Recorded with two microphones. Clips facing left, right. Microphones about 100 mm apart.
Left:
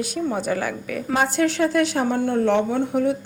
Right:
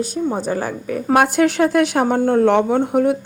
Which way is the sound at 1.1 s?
60° right (ahead or behind).